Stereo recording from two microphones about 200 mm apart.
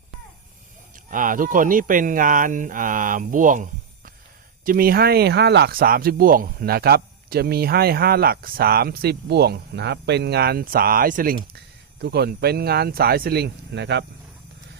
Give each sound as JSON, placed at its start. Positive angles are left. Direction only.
{"t": 1.1, "sound": "speech", "side_deg": -40}
{"t": 11.5, "sound": "speech", "side_deg": -55}